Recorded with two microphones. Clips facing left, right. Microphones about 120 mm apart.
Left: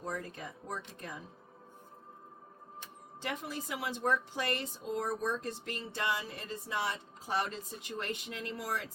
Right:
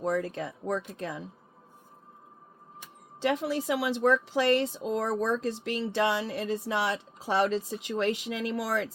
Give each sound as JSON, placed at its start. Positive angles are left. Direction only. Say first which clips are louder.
{"t": 0.0, "sound": "speech", "louder": "right 11 dB", "side_deg": -90}
{"t": 3.2, "sound": "speech", "louder": "right 11 dB", "side_deg": -90}